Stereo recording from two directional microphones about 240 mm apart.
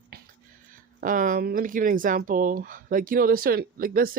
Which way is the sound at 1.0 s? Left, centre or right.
Right.